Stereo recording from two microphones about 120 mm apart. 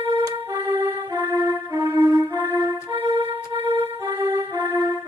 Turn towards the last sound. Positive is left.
turn(degrees=-35)  # may be behind; listen again after turning